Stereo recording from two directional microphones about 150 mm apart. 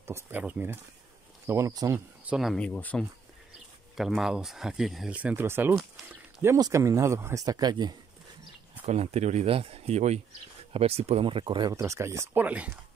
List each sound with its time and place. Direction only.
0.0 s speech: 15° right (ahead or behind)
1.5 s speech: 25° right (ahead or behind)
2.2 s speech: centre (ahead or behind)
3.9 s speech: centre (ahead or behind); by 7.9 s 25° right (ahead or behind)
8.8 s speech: 45° right (ahead or behind)
11.7 s speech: 20° right (ahead or behind)